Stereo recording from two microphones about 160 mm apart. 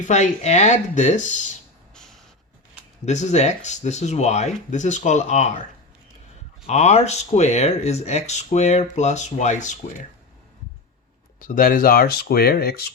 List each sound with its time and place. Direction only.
0.0 s speech: 45° left (ahead or behind)
3.1 s speech: 45° left (ahead or behind)
6.7 s speech: 40° left (ahead or behind)
11.3 s speech: 60° left (ahead or behind); by 12.8 s 75° left (ahead or behind)